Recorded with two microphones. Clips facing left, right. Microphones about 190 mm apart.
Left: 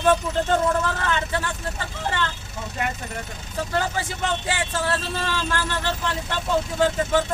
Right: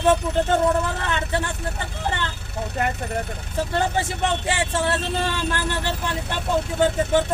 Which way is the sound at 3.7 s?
25° right (ahead or behind).